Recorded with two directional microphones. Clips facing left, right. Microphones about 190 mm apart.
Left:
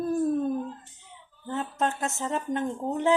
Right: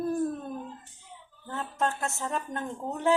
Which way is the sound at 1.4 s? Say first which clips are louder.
Left 2 dB; 20° left (ahead or behind).